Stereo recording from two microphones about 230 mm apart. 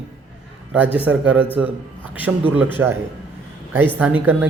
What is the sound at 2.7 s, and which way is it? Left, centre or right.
Speech, centre.